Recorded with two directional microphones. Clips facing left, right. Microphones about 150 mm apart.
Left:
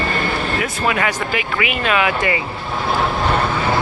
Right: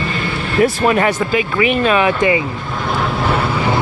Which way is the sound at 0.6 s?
35° right (ahead or behind).